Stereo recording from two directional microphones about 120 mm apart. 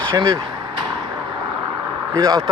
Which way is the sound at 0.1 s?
40° right (ahead or behind).